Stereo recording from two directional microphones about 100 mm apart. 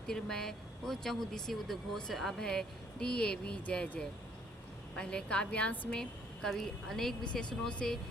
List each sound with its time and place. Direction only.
0.1 s a woman's voice: 5° left (ahead or behind)